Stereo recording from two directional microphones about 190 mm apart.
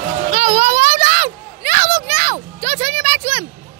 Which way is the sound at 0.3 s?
35° right (ahead or behind).